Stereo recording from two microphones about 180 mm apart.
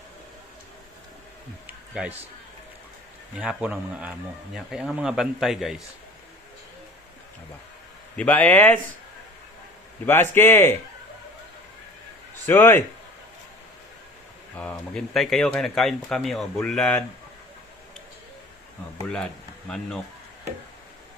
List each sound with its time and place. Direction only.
1.6 s a sound: 5° right (ahead or behind)
3.3 s a man's voice: 10° right (ahead or behind)
8.1 s speech: 10° left (ahead or behind)
10.1 s speech: 10° left (ahead or behind)
12.5 s speech: 10° left (ahead or behind)
14.5 s speech: 10° left (ahead or behind)
19.0 s speech: 5° left (ahead or behind)